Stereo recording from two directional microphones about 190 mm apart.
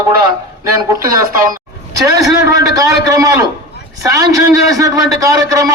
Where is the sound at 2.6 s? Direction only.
20° right (ahead or behind).